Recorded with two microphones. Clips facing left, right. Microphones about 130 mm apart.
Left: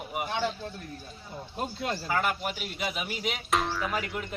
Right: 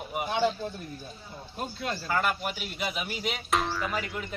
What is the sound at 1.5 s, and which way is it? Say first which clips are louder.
Speech: left 1 dB; 20° left (ahead or behind).